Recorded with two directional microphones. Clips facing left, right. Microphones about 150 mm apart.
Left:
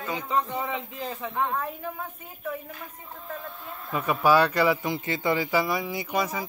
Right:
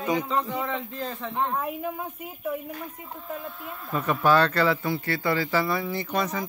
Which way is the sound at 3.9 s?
10° left (ahead or behind).